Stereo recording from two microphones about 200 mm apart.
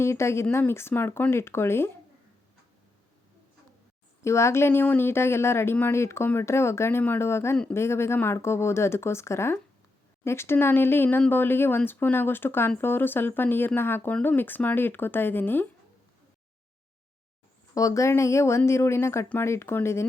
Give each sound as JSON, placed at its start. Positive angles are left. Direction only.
{"t": 0.0, "sound": "speech", "side_deg": 15}
{"t": 4.2, "sound": "speech", "side_deg": 15}
{"t": 17.7, "sound": "speech", "side_deg": 15}